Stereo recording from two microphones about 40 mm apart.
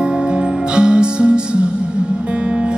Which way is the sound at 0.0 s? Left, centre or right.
Right.